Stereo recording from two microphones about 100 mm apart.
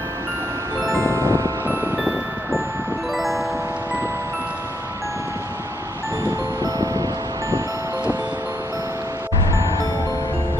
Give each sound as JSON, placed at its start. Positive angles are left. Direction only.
{"t": 0.7, "sound": "music", "side_deg": -35}
{"t": 2.0, "sound": "music", "side_deg": 0}
{"t": 6.6, "sound": "wind chime", "side_deg": -35}